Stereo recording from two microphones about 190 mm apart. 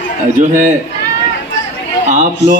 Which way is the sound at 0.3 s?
40° right (ahead or behind).